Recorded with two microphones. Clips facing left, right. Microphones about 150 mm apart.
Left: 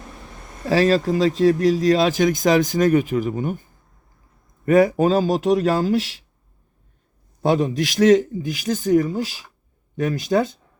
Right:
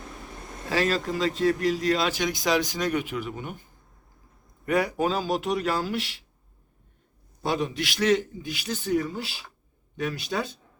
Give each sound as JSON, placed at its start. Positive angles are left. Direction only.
{"t": 0.7, "sound": "speech", "side_deg": 40}
{"t": 4.6, "sound": "speech", "side_deg": 45}
{"t": 7.4, "sound": "a man's voice", "side_deg": 50}